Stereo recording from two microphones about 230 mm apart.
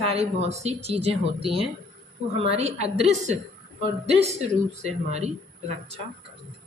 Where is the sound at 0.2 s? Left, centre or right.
Right.